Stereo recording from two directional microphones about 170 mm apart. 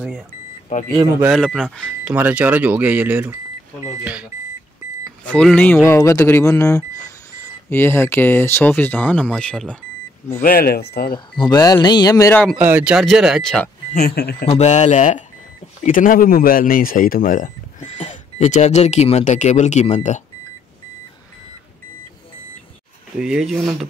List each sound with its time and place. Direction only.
0.7 s speech: 45° left (ahead or behind)
1.2 s speech: centre (ahead or behind)
2.1 s speech: 10° right (ahead or behind)
5.2 s speech: 5° left (ahead or behind)
10.4 s speech: 60° left (ahead or behind)
11.5 s speech: 25° left (ahead or behind)
12.5 s speech: 10° right (ahead or behind)
13.9 s speech: 70° left (ahead or behind)
14.4 s speech: 40° left (ahead or behind)
23.1 s speech: 5° right (ahead or behind)